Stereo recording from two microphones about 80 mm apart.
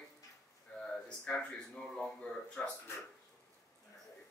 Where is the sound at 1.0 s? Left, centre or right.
Centre.